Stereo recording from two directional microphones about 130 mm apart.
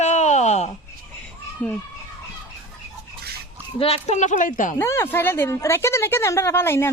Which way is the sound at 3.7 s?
50° left (ahead or behind).